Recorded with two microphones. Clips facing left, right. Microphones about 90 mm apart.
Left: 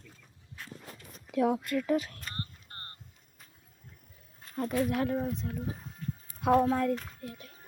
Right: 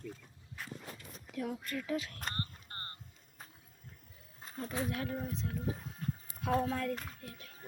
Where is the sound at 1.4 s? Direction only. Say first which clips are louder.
Left 11 dB; 85° left.